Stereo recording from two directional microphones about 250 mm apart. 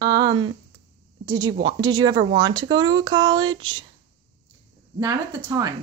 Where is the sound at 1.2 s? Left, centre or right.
Centre.